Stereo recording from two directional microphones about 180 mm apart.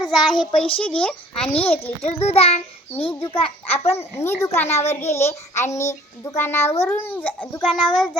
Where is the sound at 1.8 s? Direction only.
35° left (ahead or behind).